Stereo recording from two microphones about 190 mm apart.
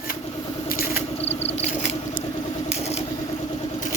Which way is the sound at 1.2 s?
30° left (ahead or behind).